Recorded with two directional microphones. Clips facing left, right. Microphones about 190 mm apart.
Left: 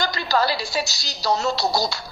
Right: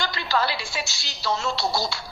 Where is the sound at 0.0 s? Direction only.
40° left (ahead or behind).